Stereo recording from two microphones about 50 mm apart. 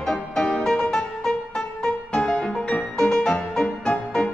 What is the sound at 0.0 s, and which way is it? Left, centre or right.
Music, centre.